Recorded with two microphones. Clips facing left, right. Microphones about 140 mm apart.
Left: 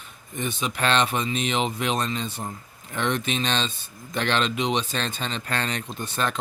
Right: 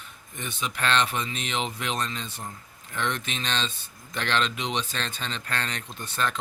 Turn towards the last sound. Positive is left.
turn(degrees=20)  # may be behind; listen again after turning